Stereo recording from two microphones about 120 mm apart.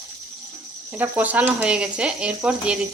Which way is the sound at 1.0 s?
15° right (ahead or behind).